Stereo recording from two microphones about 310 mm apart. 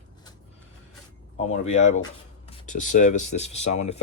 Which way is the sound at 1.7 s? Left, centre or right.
Left.